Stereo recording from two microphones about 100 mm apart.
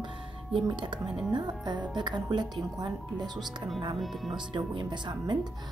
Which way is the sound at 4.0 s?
Centre (ahead or behind).